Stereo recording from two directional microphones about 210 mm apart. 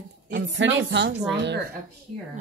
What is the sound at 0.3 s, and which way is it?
Speech, 60° right (ahead or behind).